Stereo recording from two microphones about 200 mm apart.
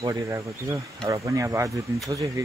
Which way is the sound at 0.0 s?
15° right (ahead or behind).